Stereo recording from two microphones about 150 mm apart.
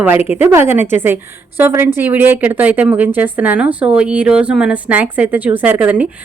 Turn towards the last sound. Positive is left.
turn(degrees=-10)  # may be behind; listen again after turning